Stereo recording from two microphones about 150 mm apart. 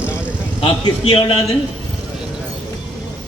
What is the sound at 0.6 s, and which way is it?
Speech, 40° left (ahead or behind).